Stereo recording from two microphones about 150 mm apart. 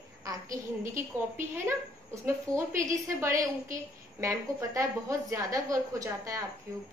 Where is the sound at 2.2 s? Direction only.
20° right (ahead or behind).